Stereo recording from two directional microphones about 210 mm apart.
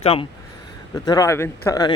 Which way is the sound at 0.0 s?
25° left (ahead or behind).